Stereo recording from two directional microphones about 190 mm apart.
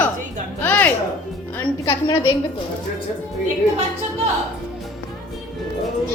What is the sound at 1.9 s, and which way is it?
Speech, 20° left (ahead or behind).